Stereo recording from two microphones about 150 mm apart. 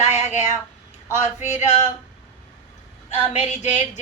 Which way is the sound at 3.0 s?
50° left (ahead or behind).